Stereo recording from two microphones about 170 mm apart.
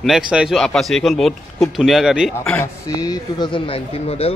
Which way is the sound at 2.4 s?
10° left (ahead or behind).